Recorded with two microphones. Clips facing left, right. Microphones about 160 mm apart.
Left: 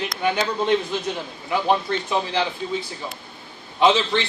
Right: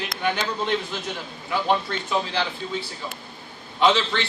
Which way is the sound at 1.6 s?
15° left (ahead or behind).